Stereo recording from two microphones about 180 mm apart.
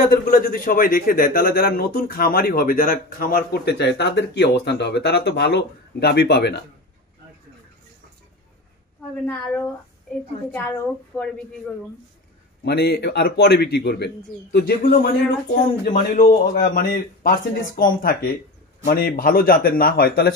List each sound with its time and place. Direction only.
0.0 s a man's voice: 55° left (ahead or behind)
9.2 s a woman's voice: 10° left (ahead or behind)
12.6 s a man's voice: 65° left (ahead or behind)